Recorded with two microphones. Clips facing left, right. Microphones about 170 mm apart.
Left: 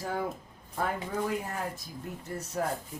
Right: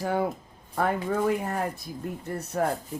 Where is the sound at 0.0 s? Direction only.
70° right (ahead or behind).